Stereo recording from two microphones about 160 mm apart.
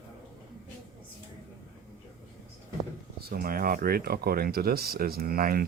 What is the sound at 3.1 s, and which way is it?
Speech, 70° right (ahead or behind).